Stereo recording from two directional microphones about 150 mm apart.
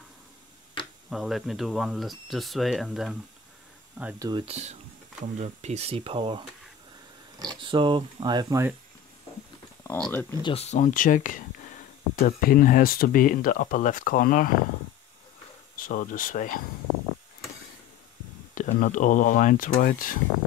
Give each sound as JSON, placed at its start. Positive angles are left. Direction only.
{"t": 1.1, "sound": "speech", "side_deg": 0}
{"t": 4.2, "sound": "speech", "side_deg": -30}
{"t": 4.5, "sound": "speech", "side_deg": -45}
{"t": 9.9, "sound": "speech", "side_deg": 5}
{"t": 10.4, "sound": "speech", "side_deg": 45}
{"t": 15.9, "sound": "speech", "side_deg": 70}
{"t": 18.5, "sound": "speech", "side_deg": 60}